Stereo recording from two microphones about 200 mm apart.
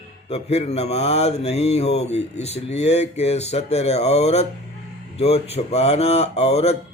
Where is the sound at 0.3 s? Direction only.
30° left (ahead or behind).